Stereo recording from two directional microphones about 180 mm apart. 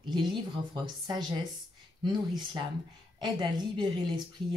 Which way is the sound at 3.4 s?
25° right (ahead or behind).